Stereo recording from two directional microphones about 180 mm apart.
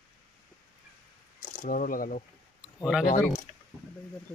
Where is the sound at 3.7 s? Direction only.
15° right (ahead or behind).